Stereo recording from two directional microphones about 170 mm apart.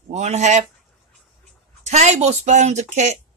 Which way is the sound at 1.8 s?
40° right (ahead or behind).